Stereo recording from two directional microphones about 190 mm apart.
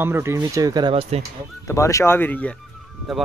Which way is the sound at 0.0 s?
15° right (ahead or behind).